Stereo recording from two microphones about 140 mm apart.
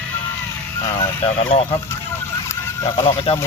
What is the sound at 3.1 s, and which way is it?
Speech, 50° left (ahead or behind).